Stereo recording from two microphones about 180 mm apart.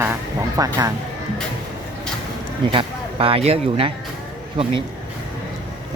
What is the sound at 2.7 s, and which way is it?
Speech, 30° right (ahead or behind).